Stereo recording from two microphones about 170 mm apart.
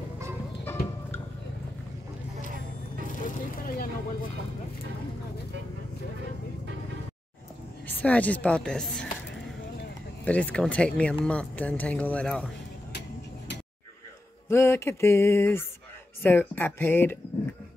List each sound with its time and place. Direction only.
0.7 s music: 15° left (ahead or behind)
3.3 s vehicle: 55° left (ahead or behind)
8.0 s speech: 10° left (ahead or behind)
10.2 s speech: 10° left (ahead or behind)
14.5 s speech: 15° left (ahead or behind)